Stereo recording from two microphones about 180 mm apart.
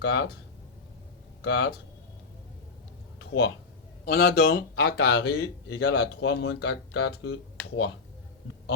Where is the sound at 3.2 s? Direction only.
70° left (ahead or behind).